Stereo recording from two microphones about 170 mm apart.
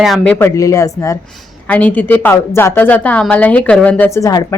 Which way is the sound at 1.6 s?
10° left (ahead or behind).